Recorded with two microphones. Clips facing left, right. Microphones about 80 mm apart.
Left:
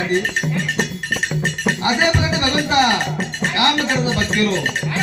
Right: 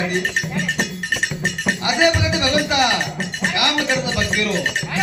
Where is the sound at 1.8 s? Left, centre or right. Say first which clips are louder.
Right 1 dB; left.